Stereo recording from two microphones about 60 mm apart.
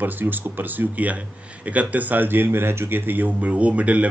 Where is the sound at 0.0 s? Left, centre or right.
Right.